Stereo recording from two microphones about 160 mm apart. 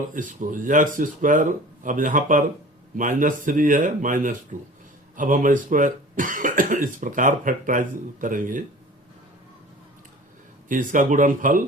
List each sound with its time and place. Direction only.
0.1 s speech: 55° right (ahead or behind)
10.7 s speech: 55° right (ahead or behind)